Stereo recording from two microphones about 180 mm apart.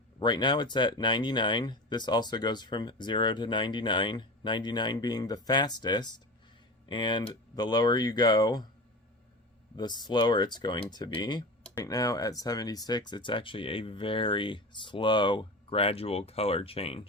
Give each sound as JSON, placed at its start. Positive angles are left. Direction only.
{"t": 0.2, "sound": "speech", "side_deg": 25}
{"t": 9.7, "sound": "speech", "side_deg": 25}